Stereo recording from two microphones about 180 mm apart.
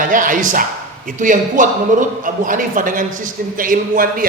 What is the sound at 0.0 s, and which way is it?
A man's voice, 50° right (ahead or behind).